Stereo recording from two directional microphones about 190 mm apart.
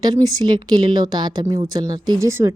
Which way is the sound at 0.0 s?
20° right (ahead or behind).